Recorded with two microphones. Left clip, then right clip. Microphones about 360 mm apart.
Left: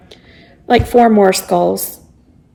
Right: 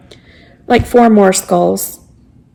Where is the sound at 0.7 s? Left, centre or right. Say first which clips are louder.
Right 1 dB; centre.